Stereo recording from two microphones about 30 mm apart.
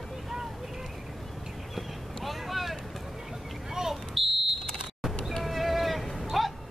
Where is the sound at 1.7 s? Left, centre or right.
Centre.